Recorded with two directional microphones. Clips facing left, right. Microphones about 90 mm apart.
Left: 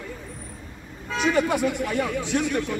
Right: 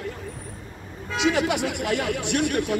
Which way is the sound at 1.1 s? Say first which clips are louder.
Even; 90° right.